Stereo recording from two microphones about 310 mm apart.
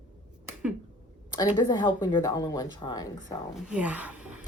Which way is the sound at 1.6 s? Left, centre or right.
Centre.